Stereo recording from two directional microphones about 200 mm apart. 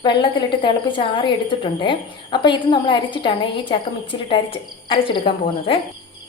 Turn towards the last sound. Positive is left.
turn(degrees=25)  # may be behind; listen again after turning